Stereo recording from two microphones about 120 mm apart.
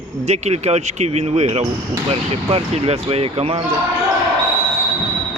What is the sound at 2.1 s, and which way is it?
Speech, 55° right (ahead or behind).